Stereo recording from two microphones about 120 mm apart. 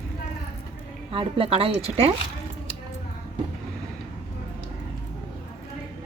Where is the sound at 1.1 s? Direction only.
50° right (ahead or behind).